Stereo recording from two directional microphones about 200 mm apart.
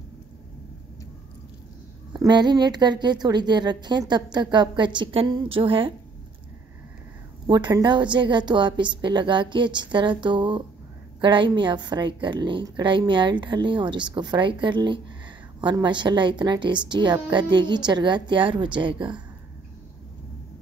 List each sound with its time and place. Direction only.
2.1 s a woman's voice: 20° right (ahead or behind)
7.4 s a woman's voice: 20° right (ahead or behind)